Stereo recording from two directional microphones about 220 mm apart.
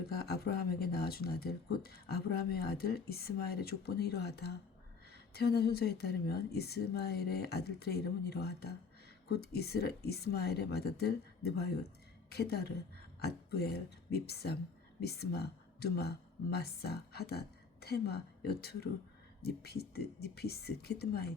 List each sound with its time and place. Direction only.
0.1 s speech: 45° left (ahead or behind)